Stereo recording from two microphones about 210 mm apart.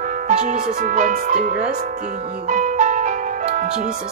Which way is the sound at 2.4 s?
35° right (ahead or behind).